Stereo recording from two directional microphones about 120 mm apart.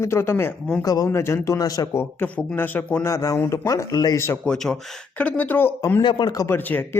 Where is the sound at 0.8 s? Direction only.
30° left (ahead or behind).